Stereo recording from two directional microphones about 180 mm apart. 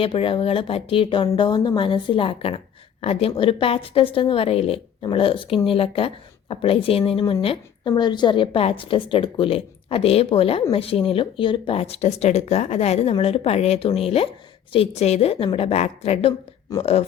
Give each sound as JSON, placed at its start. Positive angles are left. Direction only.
{"t": 0.0, "sound": "a woman's voice", "side_deg": 30}